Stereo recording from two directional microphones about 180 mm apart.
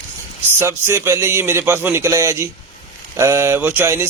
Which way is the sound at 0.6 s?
15° right (ahead or behind).